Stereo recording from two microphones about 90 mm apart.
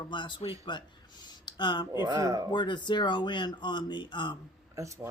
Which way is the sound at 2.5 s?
60° left (ahead or behind).